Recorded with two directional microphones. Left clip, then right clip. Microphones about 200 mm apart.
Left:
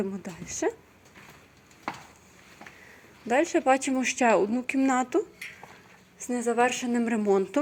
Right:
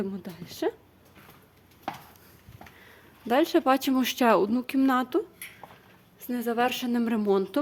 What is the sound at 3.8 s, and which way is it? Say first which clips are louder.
Speech: right 1 dB; 20° right (ahead or behind).